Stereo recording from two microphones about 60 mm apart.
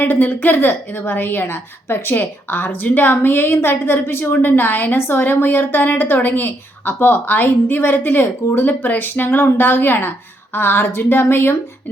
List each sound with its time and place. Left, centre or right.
0.0 s a woman's voice: left